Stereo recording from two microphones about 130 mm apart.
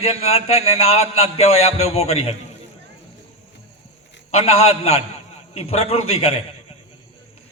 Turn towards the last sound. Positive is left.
turn(degrees=50)  # may be behind; listen again after turning